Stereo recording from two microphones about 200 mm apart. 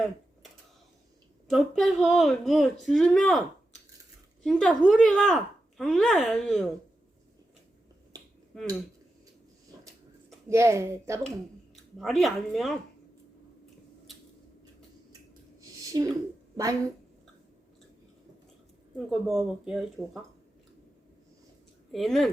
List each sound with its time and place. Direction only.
1.5 s speech: centre (ahead or behind)
4.4 s speech: centre (ahead or behind)
10.5 s speech: 15° right (ahead or behind)
11.9 s speech: centre (ahead or behind)
15.6 s a sound: 20° right (ahead or behind)
18.9 s speech: centre (ahead or behind)
21.9 s speech: centre (ahead or behind)